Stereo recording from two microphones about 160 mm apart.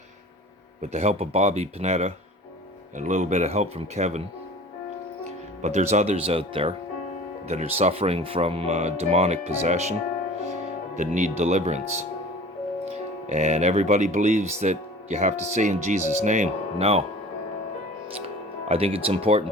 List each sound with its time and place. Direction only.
0.8 s speech: 45° right (ahead or behind)
5.6 s speech: 45° right (ahead or behind)
10.9 s speech: 50° right (ahead or behind)
13.2 s speech: 45° right (ahead or behind)
18.7 s speech: 35° right (ahead or behind)